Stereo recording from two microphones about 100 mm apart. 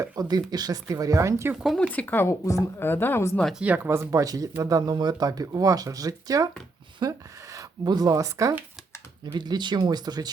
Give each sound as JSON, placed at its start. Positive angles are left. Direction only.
{"t": 0.0, "sound": "speech", "side_deg": -40}
{"t": 1.5, "sound": "speech", "side_deg": 0}
{"t": 1.8, "sound": "a woman's voice", "side_deg": 15}
{"t": 3.5, "sound": "speech", "side_deg": -15}
{"t": 3.8, "sound": "speech", "side_deg": -30}
{"t": 9.2, "sound": "speech", "side_deg": -45}